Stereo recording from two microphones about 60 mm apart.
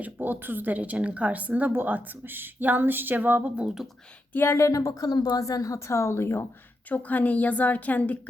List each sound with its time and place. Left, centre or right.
0.0 s a woman's voice: right
4.3 s speech: left
4.5 s a woman's voice: left
6.8 s a woman's voice: left